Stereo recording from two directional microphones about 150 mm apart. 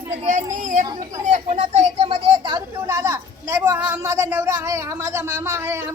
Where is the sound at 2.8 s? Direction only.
20° right (ahead or behind).